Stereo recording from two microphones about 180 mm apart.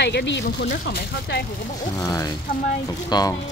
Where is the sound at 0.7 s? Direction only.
60° left (ahead or behind).